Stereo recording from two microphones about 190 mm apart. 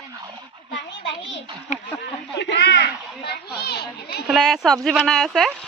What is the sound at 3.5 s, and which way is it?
Children playing, 55° left (ahead or behind).